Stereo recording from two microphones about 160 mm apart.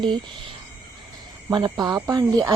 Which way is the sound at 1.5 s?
25° right (ahead or behind).